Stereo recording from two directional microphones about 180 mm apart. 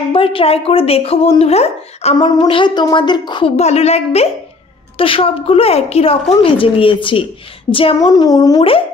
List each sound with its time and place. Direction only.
0.1 s speech: 30° left (ahead or behind)
2.1 s a woman's voice: 25° left (ahead or behind)